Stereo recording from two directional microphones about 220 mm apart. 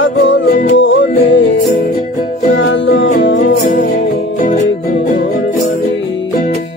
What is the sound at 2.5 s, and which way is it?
Music, 55° left (ahead or behind).